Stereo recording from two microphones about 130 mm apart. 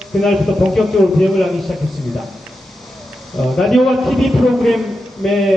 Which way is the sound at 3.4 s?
Centre (ahead or behind).